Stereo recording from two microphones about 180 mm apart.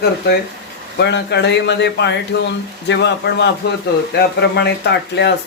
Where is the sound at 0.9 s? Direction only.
70° left (ahead or behind).